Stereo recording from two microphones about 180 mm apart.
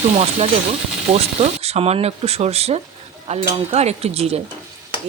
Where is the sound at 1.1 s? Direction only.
35° right (ahead or behind).